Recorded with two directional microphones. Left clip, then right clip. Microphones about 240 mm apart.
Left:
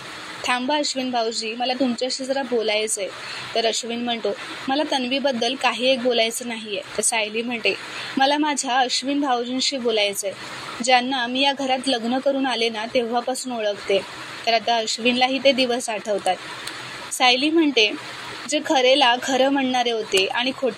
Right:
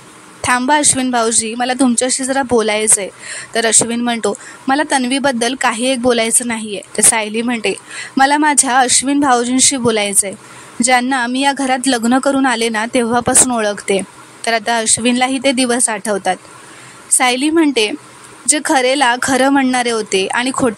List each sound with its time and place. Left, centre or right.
0.4 s a woman's voice: right
17.2 s a woman's voice: right
17.5 s a woman's voice: right